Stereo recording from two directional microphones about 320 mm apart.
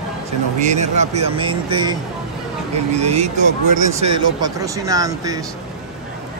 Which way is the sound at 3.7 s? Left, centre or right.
Right.